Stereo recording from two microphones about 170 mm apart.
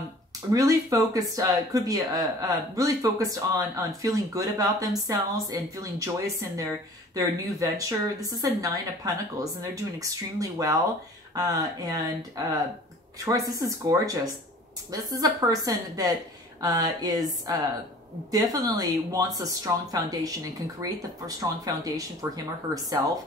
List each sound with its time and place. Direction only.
0.5 s speech: 20° right (ahead or behind)